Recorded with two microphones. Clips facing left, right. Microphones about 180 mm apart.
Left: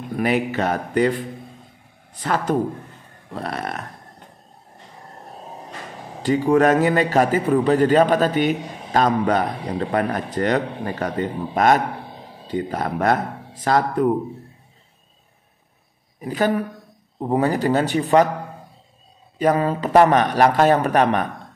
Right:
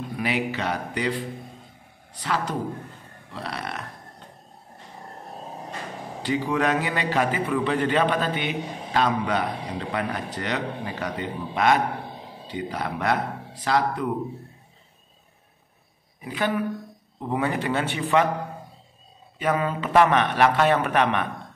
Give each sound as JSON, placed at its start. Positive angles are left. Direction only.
{"t": 0.1, "sound": "a man's voice", "side_deg": 50}
{"t": 6.2, "sound": "a man's voice", "side_deg": 45}
{"t": 16.2, "sound": "a man's voice", "side_deg": 45}
{"t": 19.3, "sound": "a man's voice", "side_deg": 40}